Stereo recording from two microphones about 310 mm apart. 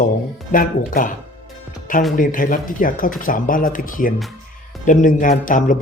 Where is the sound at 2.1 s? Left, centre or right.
Left.